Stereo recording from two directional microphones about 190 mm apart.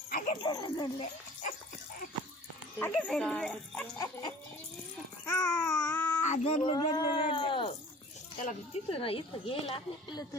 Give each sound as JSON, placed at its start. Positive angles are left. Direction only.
{"t": 0.1, "sound": "dog", "side_deg": 45}
{"t": 0.4, "sound": "speech", "side_deg": 20}
{"t": 2.7, "sound": "speech", "side_deg": 10}
{"t": 3.9, "sound": "dog", "side_deg": 15}
{"t": 5.2, "sound": "baby cry", "side_deg": 10}
{"t": 6.2, "sound": "a sound", "side_deg": 40}
{"t": 6.6, "sound": "speech", "side_deg": 20}